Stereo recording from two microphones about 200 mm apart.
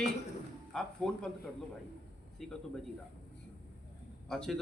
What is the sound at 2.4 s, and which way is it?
Speech, centre (ahead or behind).